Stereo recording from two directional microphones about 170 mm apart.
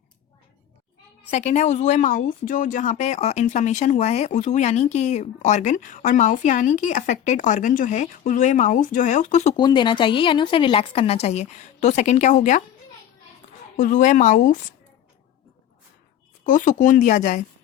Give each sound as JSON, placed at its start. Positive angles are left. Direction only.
{"t": 1.3, "sound": "speech", "side_deg": 40}
{"t": 9.6, "sound": "a woman's voice", "side_deg": 25}
{"t": 13.7, "sound": "speech", "side_deg": 50}
{"t": 16.4, "sound": "speech", "side_deg": 50}